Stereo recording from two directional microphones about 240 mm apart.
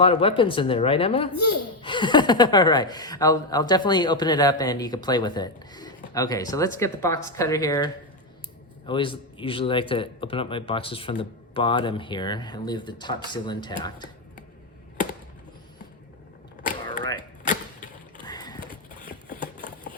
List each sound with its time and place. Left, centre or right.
0.0 s a man's voice: left
8.9 s a man's voice: left
17.2 s power windows: centre
18.3 s clip-clop: centre